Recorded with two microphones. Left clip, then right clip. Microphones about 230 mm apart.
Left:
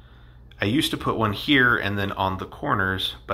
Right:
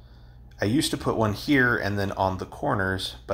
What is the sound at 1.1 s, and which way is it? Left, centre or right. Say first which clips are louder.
Speech: left 1 dB; centre.